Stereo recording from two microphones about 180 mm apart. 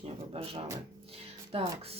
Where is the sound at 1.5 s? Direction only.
30° right (ahead or behind).